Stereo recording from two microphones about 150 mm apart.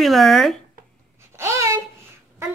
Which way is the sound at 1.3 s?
20° right (ahead or behind).